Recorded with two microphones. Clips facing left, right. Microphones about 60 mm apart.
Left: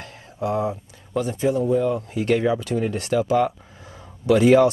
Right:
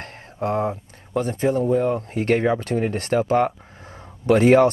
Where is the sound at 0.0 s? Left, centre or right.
Right.